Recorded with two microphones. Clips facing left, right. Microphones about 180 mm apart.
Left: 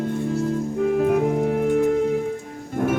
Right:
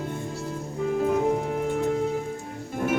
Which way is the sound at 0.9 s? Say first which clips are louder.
Left 2 dB; 65° left (ahead or behind).